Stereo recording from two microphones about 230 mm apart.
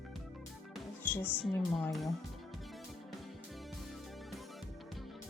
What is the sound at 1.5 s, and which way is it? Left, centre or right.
Speech, centre.